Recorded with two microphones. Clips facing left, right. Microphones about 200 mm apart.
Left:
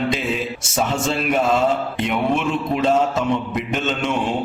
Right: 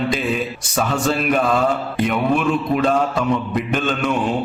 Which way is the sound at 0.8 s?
25° left (ahead or behind).